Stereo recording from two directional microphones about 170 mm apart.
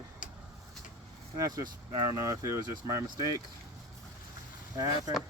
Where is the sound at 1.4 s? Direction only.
20° right (ahead or behind).